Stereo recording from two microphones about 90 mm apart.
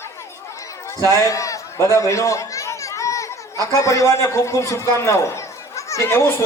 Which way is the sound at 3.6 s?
35° left (ahead or behind).